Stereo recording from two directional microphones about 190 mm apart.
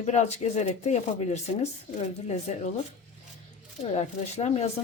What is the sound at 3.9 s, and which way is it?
Speech, 35° left (ahead or behind).